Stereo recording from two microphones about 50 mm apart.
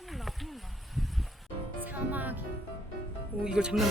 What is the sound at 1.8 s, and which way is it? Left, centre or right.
Music, right.